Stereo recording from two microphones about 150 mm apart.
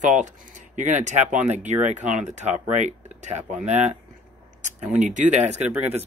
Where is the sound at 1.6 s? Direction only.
50° right (ahead or behind).